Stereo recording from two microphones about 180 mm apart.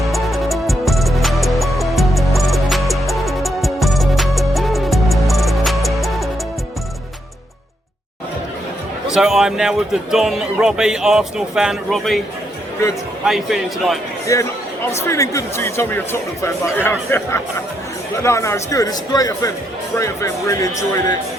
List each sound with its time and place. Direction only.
0.0 s music: centre (ahead or behind)
9.0 s speech: 5° right (ahead or behind)
13.2 s speech: centre (ahead or behind)
14.3 s a man's voice: 15° left (ahead or behind)